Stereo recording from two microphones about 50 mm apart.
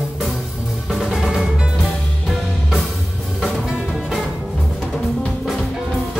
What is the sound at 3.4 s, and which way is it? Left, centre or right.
Music, centre.